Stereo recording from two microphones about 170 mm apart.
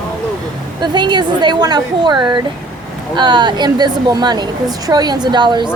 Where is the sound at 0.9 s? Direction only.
25° right (ahead or behind).